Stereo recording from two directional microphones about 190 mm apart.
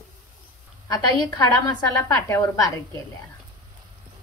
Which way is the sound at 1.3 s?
15° left (ahead or behind).